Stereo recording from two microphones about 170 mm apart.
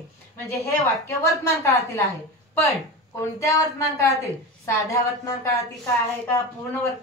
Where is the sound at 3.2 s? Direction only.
20° left (ahead or behind).